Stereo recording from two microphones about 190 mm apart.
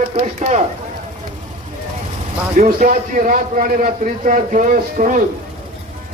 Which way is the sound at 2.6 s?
45° right (ahead or behind).